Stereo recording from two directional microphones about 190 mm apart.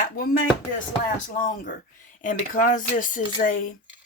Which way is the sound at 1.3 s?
45° left (ahead or behind).